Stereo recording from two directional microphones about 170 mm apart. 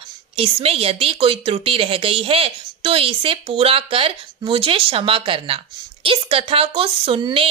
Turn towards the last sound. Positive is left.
turn(degrees=-30)  # may be behind; listen again after turning